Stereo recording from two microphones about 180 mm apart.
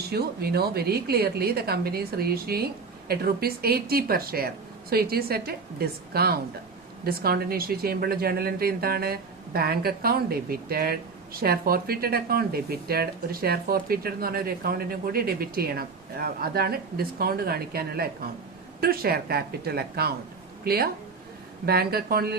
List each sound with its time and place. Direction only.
0.1 s speech: 60° right (ahead or behind)